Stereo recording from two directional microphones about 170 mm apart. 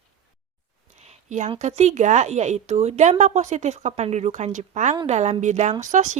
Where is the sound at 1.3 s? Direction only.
45° right (ahead or behind).